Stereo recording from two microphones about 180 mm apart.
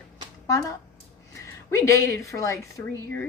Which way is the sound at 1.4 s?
15° left (ahead or behind).